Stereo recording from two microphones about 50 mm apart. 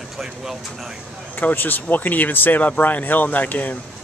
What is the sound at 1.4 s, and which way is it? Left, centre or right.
Speech, left.